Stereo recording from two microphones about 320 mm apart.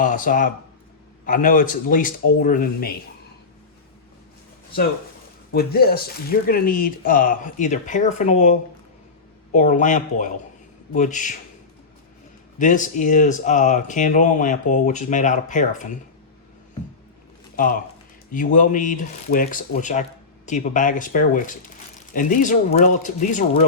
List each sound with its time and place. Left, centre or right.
0.0 s speech: left
5.5 s speech: left
12.5 s speech: left
18.3 s speech: left